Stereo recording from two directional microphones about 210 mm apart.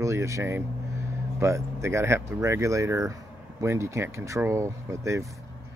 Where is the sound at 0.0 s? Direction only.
15° right (ahead or behind).